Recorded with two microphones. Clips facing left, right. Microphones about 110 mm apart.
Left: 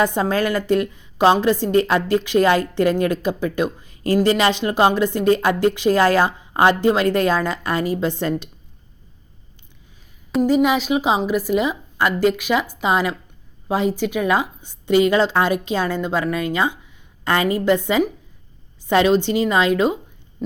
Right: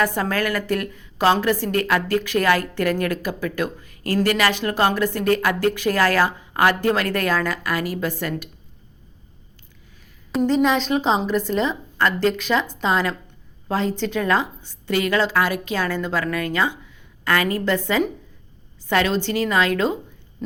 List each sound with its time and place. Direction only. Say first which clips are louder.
0.0 s a woman's voice: left 3 dB; 20° left (ahead or behind)
10.3 s a woman's voice: left 2 dB; 10° left (ahead or behind)